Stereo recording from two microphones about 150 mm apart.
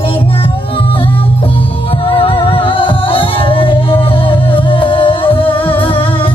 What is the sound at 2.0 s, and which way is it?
Music, 35° left (ahead or behind).